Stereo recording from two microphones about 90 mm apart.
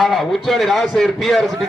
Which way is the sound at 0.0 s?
Centre (ahead or behind).